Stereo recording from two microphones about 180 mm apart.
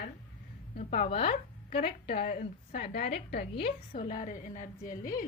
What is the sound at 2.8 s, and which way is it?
A woman's voice, 60° left (ahead or behind).